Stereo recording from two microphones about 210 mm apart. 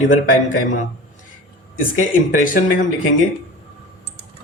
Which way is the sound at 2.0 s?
40° left (ahead or behind).